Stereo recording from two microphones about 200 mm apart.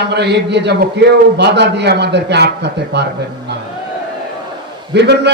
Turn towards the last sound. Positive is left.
turn(degrees=-60)  # may be behind; listen again after turning